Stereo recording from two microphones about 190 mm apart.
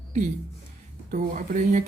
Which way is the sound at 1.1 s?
45° right (ahead or behind).